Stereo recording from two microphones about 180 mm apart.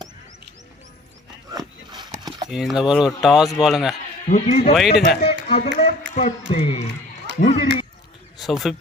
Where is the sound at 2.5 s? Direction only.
Centre (ahead or behind).